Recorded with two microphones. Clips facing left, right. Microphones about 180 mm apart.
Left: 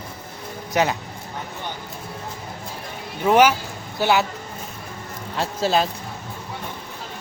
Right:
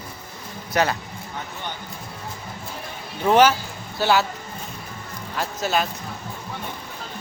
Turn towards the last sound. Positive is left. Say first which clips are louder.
# left 3 dB
turn(degrees=30)  # may be behind; listen again after turning